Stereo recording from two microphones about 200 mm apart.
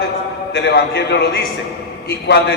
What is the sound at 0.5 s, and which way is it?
A man's voice, 55° left (ahead or behind).